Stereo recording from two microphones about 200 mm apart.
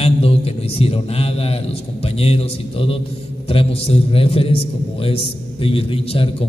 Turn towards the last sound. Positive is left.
turn(degrees=30)  # may be behind; listen again after turning